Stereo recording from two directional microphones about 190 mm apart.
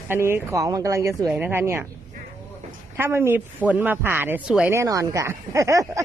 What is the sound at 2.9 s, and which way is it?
Speech, 10° right (ahead or behind).